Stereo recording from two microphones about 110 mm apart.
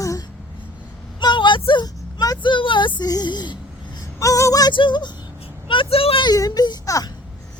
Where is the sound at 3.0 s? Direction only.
40° left (ahead or behind).